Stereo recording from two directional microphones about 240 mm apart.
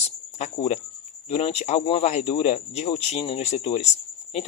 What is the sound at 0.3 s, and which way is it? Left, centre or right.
Speech, left.